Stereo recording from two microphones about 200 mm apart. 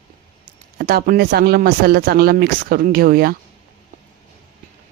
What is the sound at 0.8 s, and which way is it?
A woman's voice, 50° right (ahead or behind).